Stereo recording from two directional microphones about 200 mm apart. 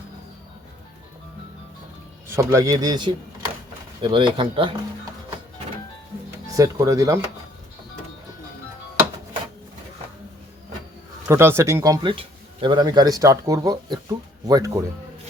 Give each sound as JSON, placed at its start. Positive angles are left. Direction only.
{"t": 2.2, "sound": "speech", "side_deg": -15}
{"t": 6.6, "sound": "speech", "side_deg": -15}
{"t": 11.3, "sound": "speech", "side_deg": -10}